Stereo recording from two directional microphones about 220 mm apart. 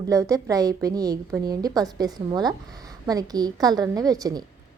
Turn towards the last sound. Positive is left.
turn(degrees=-15)  # may be behind; listen again after turning